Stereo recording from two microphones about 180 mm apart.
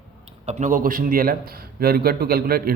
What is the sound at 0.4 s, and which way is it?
A man's voice, 45° right (ahead or behind).